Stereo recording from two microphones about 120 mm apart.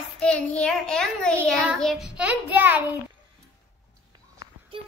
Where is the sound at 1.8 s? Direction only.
Centre (ahead or behind).